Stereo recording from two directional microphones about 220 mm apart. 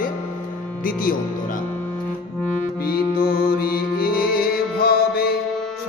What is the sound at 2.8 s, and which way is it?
Music, 45° left (ahead or behind).